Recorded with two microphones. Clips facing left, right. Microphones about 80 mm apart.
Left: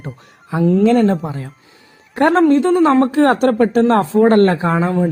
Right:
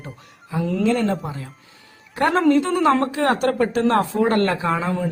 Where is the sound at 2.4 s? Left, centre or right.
Left.